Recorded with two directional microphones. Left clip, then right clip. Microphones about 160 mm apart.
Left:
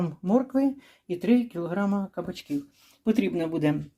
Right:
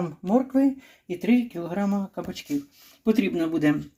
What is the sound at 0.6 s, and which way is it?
Speech, centre (ahead or behind).